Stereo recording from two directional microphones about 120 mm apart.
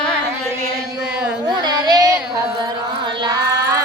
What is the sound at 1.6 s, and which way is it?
Child singing, 35° right (ahead or behind).